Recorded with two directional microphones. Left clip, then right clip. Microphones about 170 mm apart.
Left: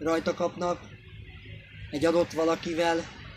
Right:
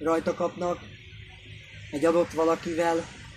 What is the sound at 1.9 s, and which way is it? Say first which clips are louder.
A man's voice: right 1 dB; centre (ahead or behind).